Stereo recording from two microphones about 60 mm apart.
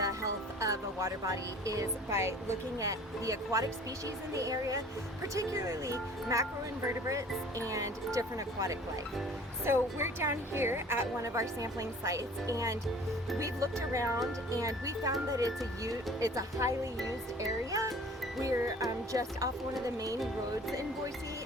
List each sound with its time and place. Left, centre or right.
0.0 s music: right
2.0 s a woman's voice: right
2.8 s speech: right
7.7 s speech: right
9.6 s a woman's voice: right
11.2 s speech: right
17.4 s speech: right